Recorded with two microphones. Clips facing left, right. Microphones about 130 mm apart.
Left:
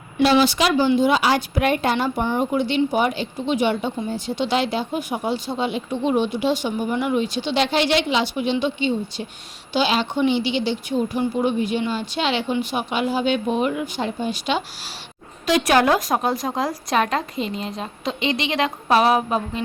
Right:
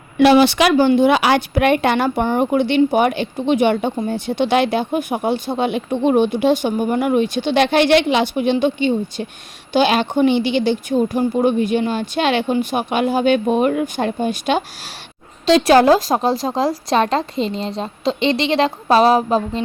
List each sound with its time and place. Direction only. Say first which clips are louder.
0.2 s a woman's voice: right 5 dB; 65° right (ahead or behind)
15.4 s a woman's voice: right 6 dB; 30° right (ahead or behind)